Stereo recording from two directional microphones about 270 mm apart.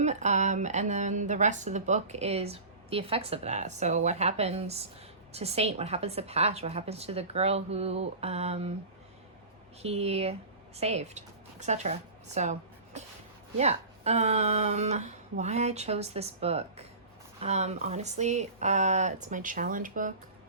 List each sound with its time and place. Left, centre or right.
0.0 s a woman's voice: right
9.8 s a woman's voice: right